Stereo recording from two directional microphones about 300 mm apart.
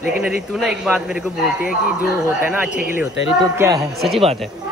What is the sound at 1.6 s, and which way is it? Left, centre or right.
Speech, left.